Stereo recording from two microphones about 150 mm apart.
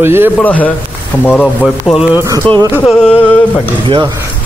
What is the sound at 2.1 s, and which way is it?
Speech, 20° right (ahead or behind).